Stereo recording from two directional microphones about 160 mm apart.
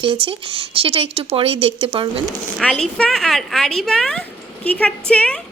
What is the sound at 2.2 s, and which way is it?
A woman's voice, 5° left (ahead or behind).